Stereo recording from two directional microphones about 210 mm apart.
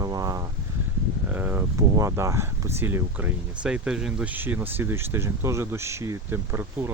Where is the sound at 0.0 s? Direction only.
15° right (ahead or behind).